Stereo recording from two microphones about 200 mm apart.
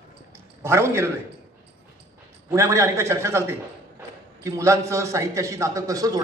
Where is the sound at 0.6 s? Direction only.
15° right (ahead or behind).